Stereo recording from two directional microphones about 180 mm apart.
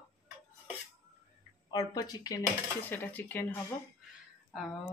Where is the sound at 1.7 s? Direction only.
20° left (ahead or behind).